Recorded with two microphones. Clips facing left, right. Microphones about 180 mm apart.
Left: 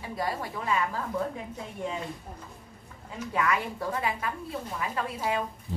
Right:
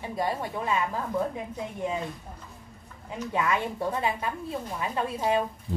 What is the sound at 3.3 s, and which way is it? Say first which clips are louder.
A woman's voice: right 1 dB; 25° right (ahead or behind).